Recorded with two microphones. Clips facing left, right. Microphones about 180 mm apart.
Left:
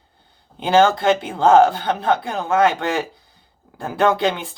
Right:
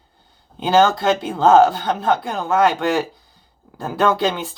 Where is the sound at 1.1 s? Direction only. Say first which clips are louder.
Even; 20° left (ahead or behind).